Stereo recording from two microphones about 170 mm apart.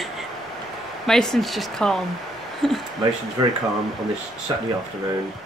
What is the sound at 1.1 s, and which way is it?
A woman's voice, centre (ahead or behind).